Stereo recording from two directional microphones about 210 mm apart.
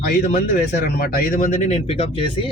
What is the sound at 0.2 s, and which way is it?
Speech, 40° left (ahead or behind).